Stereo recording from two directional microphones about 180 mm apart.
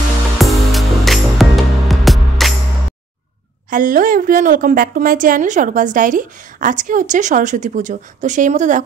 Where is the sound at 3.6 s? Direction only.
50° right (ahead or behind).